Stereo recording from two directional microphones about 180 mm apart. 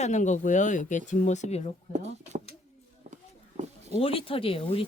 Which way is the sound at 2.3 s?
40° right (ahead or behind).